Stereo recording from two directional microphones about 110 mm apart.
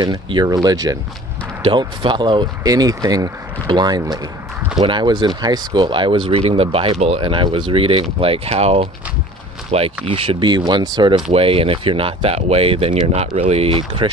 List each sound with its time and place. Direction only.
0.0 s speech: 40° right (ahead or behind)
1.6 s speech: 45° right (ahead or behind)
11.3 s speech: 60° right (ahead or behind)